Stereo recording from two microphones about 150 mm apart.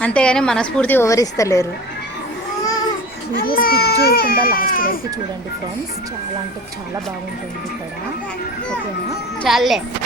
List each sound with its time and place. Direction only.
0.0 s a woman's voice: 5° left (ahead or behind)
3.3 s baby cry: 75° left (ahead or behind)
9.4 s speech: centre (ahead or behind)